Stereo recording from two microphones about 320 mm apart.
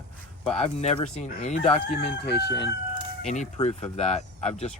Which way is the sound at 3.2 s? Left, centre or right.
Left.